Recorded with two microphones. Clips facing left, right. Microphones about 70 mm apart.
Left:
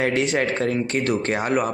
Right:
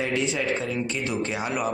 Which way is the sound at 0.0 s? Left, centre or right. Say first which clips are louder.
Left 5 dB; left.